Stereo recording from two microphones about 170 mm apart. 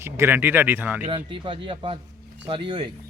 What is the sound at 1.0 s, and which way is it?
Speech, 30° right (ahead or behind).